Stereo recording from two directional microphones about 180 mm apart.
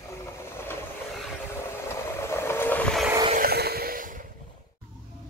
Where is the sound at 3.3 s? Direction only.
55° right (ahead or behind).